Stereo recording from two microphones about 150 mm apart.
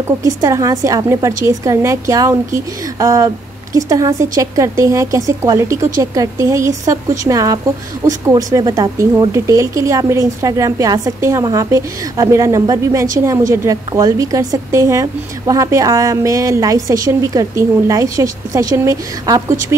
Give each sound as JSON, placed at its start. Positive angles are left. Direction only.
{"t": 0.2, "sound": "a woman's voice", "side_deg": -20}